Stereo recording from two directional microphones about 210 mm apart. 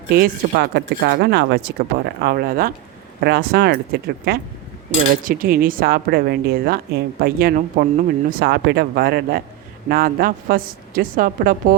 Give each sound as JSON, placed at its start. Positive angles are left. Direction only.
{"t": 0.1, "sound": "speech", "side_deg": -50}